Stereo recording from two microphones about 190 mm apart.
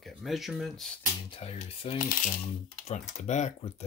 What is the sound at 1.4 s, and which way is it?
Speech, 30° left (ahead or behind).